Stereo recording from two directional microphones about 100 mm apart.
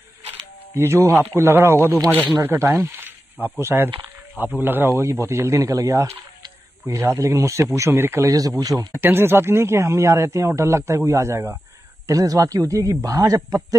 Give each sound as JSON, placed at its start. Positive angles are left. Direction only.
{"t": 0.7, "sound": "speech", "side_deg": -25}
{"t": 3.0, "sound": "snake", "side_deg": -20}
{"t": 3.5, "sound": "speech", "side_deg": -25}
{"t": 8.3, "sound": "a man's voice", "side_deg": -35}
{"t": 8.9, "sound": "a man's voice", "side_deg": -25}